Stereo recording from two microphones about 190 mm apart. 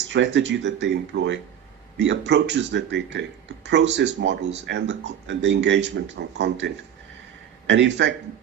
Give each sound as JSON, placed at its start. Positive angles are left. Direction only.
{"t": 0.1, "sound": "speech", "side_deg": -70}
{"t": 7.7, "sound": "speech", "side_deg": -65}